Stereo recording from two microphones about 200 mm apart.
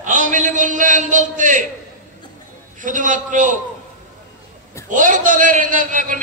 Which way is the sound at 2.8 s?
40° right (ahead or behind).